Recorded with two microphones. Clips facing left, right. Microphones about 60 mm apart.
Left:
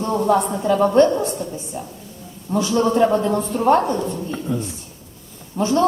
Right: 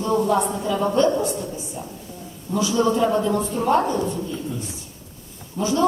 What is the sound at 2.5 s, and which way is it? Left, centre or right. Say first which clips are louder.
A woman's voice: left 2 dB; left.